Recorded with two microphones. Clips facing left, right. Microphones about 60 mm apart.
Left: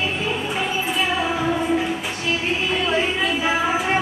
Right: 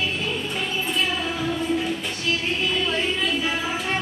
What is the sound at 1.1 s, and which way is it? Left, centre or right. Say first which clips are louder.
Child singing: left 5 dB; centre.